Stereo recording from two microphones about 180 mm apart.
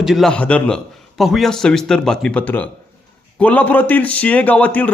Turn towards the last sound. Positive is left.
turn(degrees=10)  # may be behind; listen again after turning